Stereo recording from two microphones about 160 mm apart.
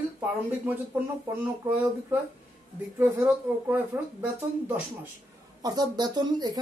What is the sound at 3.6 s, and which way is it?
Speech, 10° right (ahead or behind).